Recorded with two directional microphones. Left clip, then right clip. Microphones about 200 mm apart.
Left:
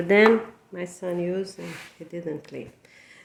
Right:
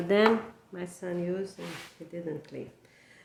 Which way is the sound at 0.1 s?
15° left (ahead or behind).